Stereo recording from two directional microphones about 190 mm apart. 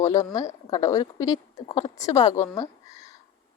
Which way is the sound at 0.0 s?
15° left (ahead or behind).